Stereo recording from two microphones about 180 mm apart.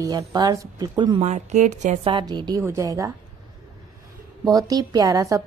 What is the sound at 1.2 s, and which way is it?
Speech, 40° right (ahead or behind).